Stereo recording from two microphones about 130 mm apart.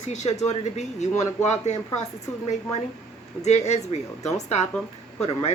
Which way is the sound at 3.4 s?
60° left (ahead or behind).